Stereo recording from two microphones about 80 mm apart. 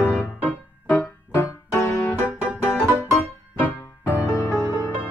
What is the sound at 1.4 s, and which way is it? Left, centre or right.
Music, left.